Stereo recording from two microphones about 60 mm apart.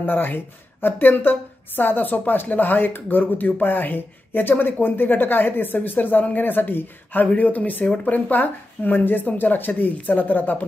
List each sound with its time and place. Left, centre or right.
0.0 s a woman's voice: left